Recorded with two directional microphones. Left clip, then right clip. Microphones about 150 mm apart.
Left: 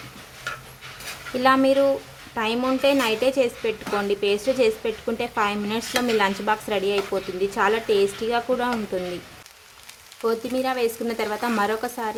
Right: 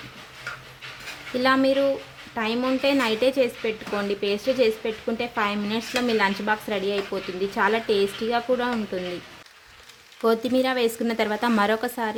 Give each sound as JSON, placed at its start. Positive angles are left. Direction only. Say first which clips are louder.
{"t": 1.4, "sound": "speech", "louder": "left 2 dB", "side_deg": -5}
{"t": 10.2, "sound": "speech", "louder": "right 2 dB", "side_deg": -20}